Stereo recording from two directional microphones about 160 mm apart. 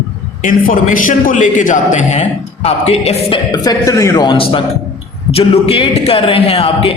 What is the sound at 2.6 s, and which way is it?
A man's voice, 40° left (ahead or behind).